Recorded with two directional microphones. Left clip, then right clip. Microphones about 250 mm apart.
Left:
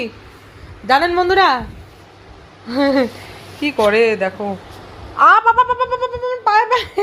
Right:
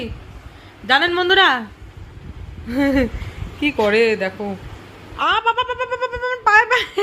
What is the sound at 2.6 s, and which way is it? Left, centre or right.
A child's voice, centre.